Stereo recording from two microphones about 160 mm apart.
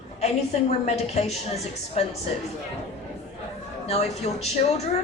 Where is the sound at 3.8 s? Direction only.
40° left (ahead or behind).